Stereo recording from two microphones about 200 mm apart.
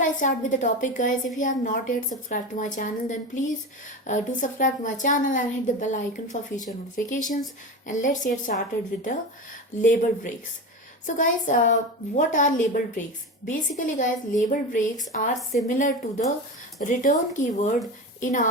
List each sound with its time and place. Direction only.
0.0 s a woman's voice: 40° left (ahead or behind)
11.0 s a woman's voice: 40° left (ahead or behind)